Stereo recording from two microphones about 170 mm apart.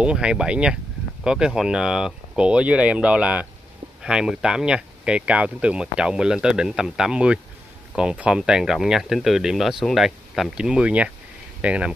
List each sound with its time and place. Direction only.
0.0 s speech: 5° right (ahead or behind)